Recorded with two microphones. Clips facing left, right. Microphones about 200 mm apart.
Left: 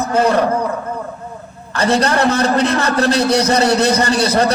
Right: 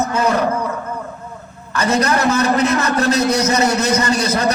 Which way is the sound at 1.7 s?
30° left (ahead or behind).